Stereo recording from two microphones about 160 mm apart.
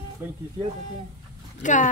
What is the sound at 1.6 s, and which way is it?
Speech, 50° left (ahead or behind).